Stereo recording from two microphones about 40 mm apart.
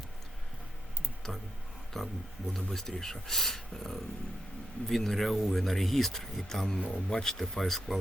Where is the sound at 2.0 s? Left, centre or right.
Centre.